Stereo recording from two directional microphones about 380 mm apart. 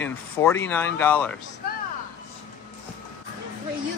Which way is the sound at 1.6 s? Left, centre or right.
Left.